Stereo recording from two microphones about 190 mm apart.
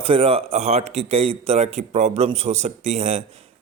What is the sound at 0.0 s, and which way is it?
A man's voice, 30° right (ahead or behind).